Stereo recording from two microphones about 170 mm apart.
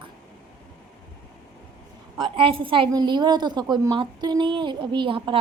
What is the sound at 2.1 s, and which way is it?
A woman's voice, 30° right (ahead or behind).